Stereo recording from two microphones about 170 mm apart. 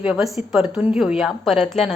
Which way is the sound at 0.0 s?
5° right (ahead or behind).